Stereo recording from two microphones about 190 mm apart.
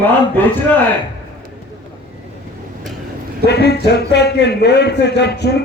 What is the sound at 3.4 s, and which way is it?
A man's voice, 60° left (ahead or behind).